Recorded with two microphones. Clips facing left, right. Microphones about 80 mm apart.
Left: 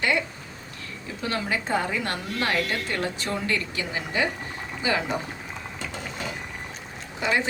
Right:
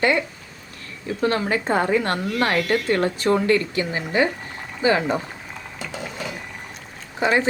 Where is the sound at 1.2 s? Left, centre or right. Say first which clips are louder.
Right 6 dB; right.